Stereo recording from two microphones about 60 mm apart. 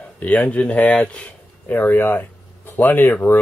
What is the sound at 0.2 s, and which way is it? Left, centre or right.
Speech, left.